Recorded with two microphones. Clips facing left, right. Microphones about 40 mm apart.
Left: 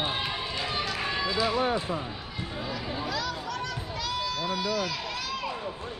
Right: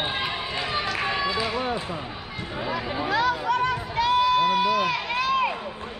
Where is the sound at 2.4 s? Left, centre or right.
Right.